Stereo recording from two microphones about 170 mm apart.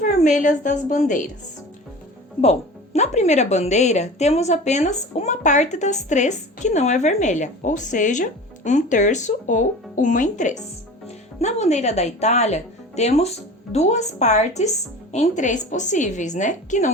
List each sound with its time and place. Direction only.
0.0 s speech: 45° left (ahead or behind)
2.4 s speech: 40° left (ahead or behind)